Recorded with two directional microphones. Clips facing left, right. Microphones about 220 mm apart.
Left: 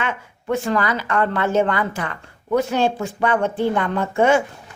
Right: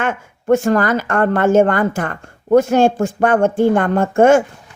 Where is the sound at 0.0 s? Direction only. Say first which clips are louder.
Right 5 dB; 45° right (ahead or behind).